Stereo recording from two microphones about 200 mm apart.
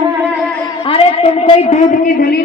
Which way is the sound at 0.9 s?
30° left (ahead or behind).